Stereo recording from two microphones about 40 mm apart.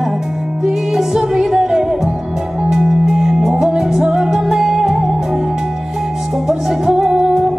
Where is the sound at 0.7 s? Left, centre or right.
Centre.